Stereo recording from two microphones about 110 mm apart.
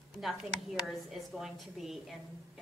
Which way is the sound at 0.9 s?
Centre (ahead or behind).